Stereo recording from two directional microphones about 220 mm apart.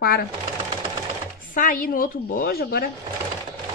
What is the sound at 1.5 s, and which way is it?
Speech, 35° left (ahead or behind).